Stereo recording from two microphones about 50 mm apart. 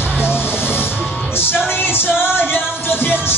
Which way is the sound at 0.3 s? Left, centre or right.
Left.